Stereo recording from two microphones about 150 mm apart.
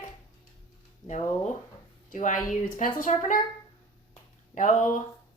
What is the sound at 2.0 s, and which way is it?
A woman's voice, 60° left (ahead or behind).